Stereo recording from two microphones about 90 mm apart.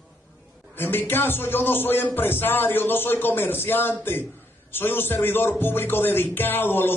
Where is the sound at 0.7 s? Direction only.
20° left (ahead or behind).